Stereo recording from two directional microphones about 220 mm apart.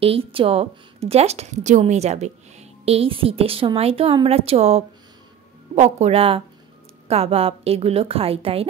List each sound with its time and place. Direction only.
0.0 s a woman's voice: 25° right (ahead or behind)